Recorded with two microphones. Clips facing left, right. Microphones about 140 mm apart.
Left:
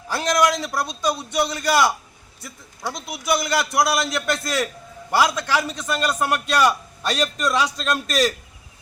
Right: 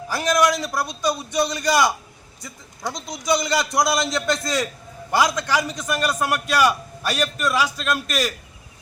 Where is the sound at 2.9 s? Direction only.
20° right (ahead or behind).